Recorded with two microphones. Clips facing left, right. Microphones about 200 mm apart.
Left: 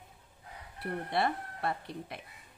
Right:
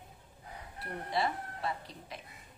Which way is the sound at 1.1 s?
60° left (ahead or behind).